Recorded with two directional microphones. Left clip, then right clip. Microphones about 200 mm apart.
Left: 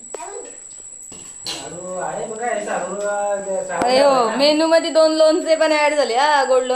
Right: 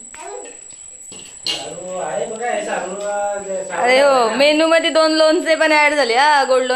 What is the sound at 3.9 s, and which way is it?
A man's voice, 5° right (ahead or behind).